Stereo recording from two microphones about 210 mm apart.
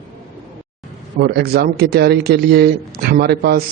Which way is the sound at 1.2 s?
50° right (ahead or behind).